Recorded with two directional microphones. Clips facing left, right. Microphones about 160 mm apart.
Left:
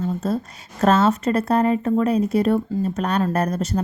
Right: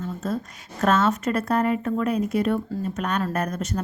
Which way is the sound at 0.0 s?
30° left (ahead or behind).